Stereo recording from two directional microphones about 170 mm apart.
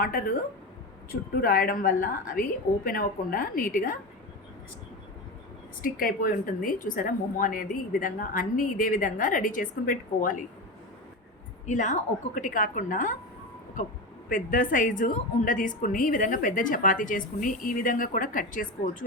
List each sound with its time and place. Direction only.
0.0 s a woman's voice: 60° left (ahead or behind)
1.4 s a woman's voice: 55° left (ahead or behind)
5.8 s a woman's voice: 55° left (ahead or behind)
11.6 s a woman's voice: 45° left (ahead or behind)
14.3 s a woman's voice: 50° left (ahead or behind)